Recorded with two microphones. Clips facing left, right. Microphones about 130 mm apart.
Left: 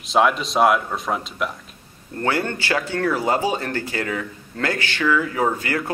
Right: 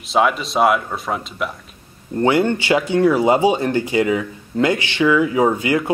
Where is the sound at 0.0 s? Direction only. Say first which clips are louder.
Right 1 dB; centre (ahead or behind).